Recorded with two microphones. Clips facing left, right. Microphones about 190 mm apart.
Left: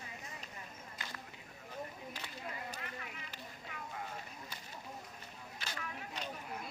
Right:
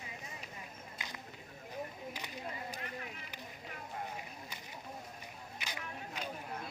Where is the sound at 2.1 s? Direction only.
15° right (ahead or behind).